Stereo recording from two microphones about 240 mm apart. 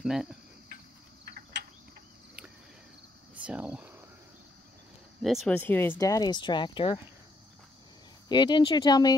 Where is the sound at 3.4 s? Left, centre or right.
Centre.